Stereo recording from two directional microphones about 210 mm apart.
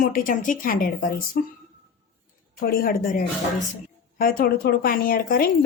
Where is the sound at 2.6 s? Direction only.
45° left (ahead or behind).